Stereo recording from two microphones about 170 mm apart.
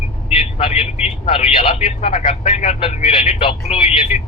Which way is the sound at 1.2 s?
35° left (ahead or behind).